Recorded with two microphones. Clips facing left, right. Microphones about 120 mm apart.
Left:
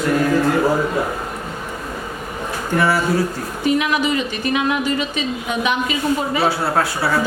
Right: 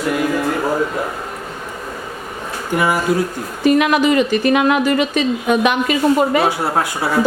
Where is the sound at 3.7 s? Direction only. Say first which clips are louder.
Right 6 dB; 60° right (ahead or behind).